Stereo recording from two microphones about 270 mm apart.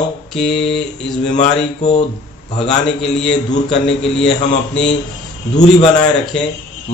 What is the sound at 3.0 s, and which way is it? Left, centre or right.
A man's voice, centre.